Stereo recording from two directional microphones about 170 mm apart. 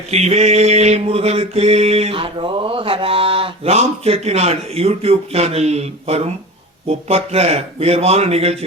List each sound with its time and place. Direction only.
0.1 s mantra: 40° right (ahead or behind)